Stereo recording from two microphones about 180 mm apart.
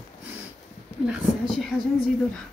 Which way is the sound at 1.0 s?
5° right (ahead or behind).